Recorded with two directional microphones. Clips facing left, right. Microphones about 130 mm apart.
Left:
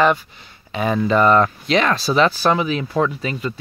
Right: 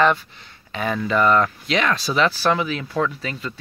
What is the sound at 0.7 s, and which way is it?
Speech, 25° left (ahead or behind).